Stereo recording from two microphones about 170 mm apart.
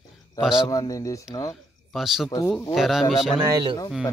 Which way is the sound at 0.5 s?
25° left (ahead or behind).